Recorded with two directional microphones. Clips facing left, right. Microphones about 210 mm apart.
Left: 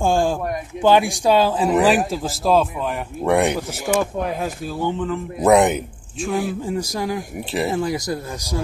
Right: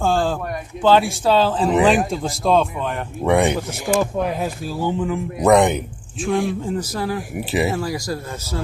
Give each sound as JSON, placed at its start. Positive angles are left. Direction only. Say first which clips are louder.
{"t": 0.0, "sound": "a sound", "louder": "left 1 dB", "side_deg": 15}
{"t": 0.8, "sound": "speech", "louder": "even", "side_deg": 15}
{"t": 4.4, "sound": "speech", "louder": "right 1 dB", "side_deg": -10}
{"t": 5.4, "sound": "speech", "louder": "even", "side_deg": 5}
{"t": 7.3, "sound": "speech", "louder": "right 5 dB", "side_deg": -5}
{"t": 7.7, "sound": "speech", "louder": "left 2 dB", "side_deg": 20}